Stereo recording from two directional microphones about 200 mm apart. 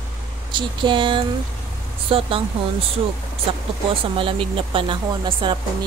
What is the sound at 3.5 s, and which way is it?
Speech, 30° right (ahead or behind).